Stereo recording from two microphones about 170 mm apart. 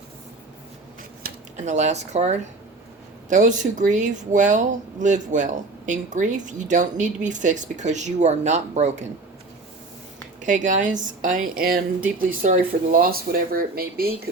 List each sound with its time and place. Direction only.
1.5 s speech: 45° right (ahead or behind)
10.4 s speech: 45° right (ahead or behind)